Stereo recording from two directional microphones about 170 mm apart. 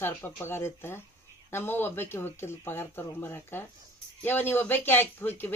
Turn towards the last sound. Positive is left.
turn(degrees=10)  # may be behind; listen again after turning